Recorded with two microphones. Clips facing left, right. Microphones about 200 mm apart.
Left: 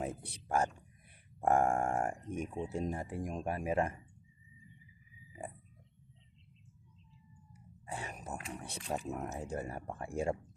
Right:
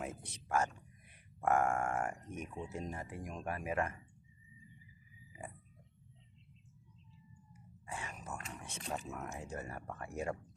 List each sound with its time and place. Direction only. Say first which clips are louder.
0.3 s speech: left 1 dB; 35° left (ahead or behind)
7.9 s speech: left 3 dB; 35° left (ahead or behind)